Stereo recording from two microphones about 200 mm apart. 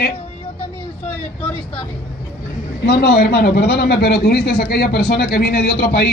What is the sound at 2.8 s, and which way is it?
A man's voice, 55° left (ahead or behind).